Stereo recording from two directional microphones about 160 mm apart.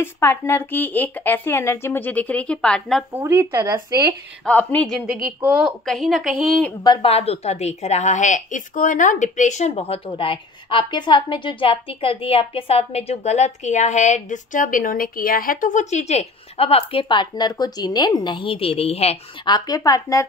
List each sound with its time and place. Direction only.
0.0 s speech: 15° left (ahead or behind)
3.1 s speech: 15° right (ahead or behind)
4.5 s speech: 10° left (ahead or behind)
5.4 s a woman's voice: 10° right (ahead or behind)
6.8 s speech: 25° left (ahead or behind)
7.1 s a woman's voice: 40° left (ahead or behind)
19.4 s speech: 25° left (ahead or behind)